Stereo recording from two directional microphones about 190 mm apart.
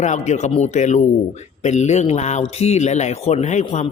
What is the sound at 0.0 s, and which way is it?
A man's voice, 40° left (ahead or behind).